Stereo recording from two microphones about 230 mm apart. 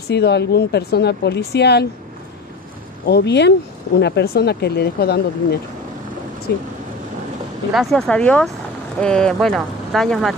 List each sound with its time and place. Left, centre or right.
0.1 s speech: left
3.1 s speech: left
7.7 s speech: centre